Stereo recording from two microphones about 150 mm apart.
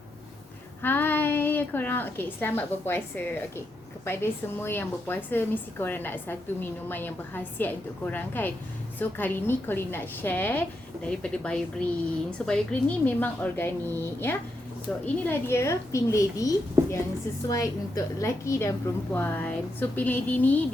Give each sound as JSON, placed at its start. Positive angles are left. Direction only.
{"t": 0.8, "sound": "a woman's voice", "side_deg": 15}